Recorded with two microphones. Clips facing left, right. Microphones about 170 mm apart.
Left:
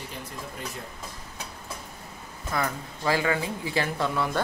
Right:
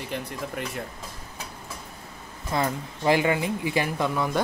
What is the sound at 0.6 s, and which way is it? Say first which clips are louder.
Speech: right 4 dB; 65° right (ahead or behind).